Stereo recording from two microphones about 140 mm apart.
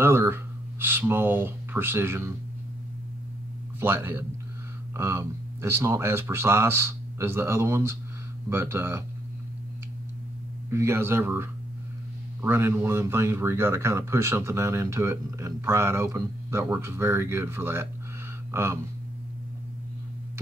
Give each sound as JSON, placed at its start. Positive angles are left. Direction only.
{"t": 0.0, "sound": "speech", "side_deg": -15}
{"t": 3.8, "sound": "speech", "side_deg": -15}
{"t": 10.7, "sound": "speech", "side_deg": -20}